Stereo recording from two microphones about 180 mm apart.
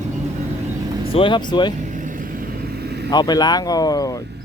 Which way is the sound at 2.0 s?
50° right (ahead or behind).